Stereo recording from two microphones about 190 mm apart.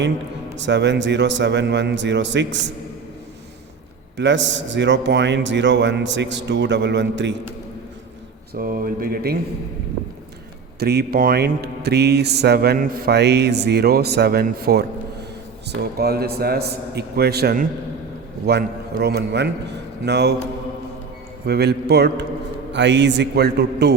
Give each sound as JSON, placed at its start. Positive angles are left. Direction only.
{"t": 0.5, "sound": "a man's voice", "side_deg": -65}
{"t": 4.2, "sound": "a man's voice", "side_deg": -70}
{"t": 8.5, "sound": "speech", "side_deg": -50}
{"t": 10.8, "sound": "speech", "side_deg": -55}
{"t": 21.4, "sound": "a man's voice", "side_deg": -60}